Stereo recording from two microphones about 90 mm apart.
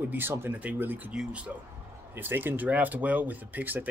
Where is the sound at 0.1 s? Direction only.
25° right (ahead or behind).